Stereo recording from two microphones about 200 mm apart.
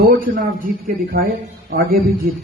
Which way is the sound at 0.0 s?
45° right (ahead or behind).